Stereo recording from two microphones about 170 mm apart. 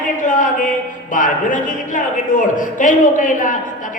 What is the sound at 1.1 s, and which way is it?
A man's voice, 50° left (ahead or behind).